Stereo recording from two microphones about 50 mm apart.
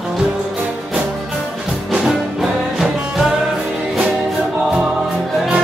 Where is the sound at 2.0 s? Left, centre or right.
Centre.